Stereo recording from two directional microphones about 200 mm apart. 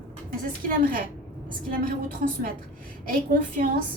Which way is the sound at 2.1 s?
40° right (ahead or behind).